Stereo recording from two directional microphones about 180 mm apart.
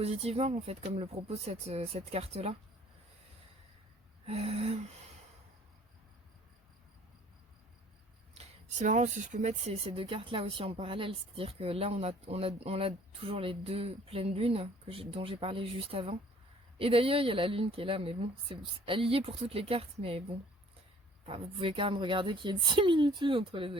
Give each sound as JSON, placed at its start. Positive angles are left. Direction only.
{"t": 0.0, "sound": "speech", "side_deg": -35}
{"t": 4.3, "sound": "speech", "side_deg": -35}
{"t": 8.4, "sound": "speech", "side_deg": -40}
{"t": 21.2, "sound": "a woman's voice", "side_deg": -30}